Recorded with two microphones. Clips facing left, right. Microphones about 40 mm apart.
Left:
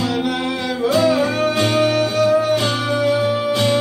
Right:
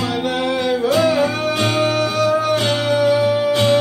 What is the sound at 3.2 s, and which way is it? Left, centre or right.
Music, centre.